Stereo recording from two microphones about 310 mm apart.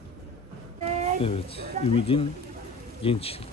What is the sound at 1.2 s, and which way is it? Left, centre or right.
Speech, centre.